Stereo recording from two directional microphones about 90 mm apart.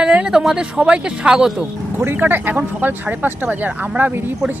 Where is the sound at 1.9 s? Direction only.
20° right (ahead or behind).